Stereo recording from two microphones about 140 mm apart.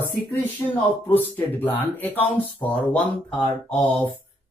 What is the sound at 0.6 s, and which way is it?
Speech, 10° left (ahead or behind).